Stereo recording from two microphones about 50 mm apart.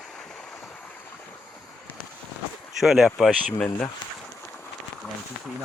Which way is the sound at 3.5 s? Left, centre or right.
Left.